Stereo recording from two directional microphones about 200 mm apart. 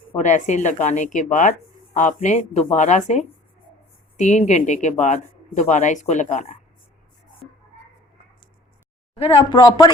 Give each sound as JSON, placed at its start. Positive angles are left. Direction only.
{"t": 0.2, "sound": "speech", "side_deg": 35}
{"t": 9.1, "sound": "speech", "side_deg": 30}